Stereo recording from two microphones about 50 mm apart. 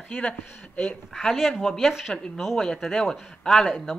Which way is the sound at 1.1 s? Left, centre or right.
Centre.